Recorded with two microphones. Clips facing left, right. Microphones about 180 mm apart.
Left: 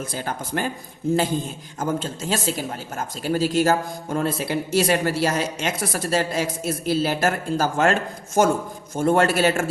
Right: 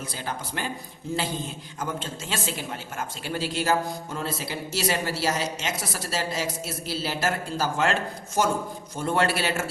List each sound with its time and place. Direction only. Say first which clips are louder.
0.1 s a woman's voice: left 6 dB; 50° left (ahead or behind)
1.8 s a woman's voice: left 7 dB; 40° left (ahead or behind)